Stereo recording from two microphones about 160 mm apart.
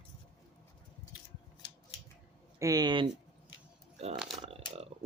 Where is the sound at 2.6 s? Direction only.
25° right (ahead or behind).